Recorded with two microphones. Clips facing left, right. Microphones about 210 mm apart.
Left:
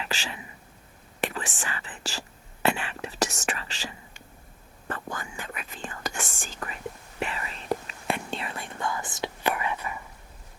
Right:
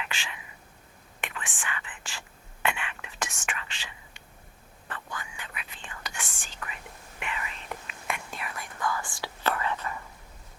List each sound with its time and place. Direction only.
0.0 s whispering: 35° left (ahead or behind)
1.2 s speech: 35° left (ahead or behind)
2.6 s whispering: 35° left (ahead or behind); by 10.0 s 15° left (ahead or behind)